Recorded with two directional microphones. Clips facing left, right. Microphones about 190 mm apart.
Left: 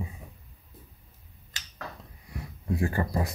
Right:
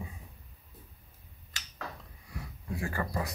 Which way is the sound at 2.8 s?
25° left (ahead or behind).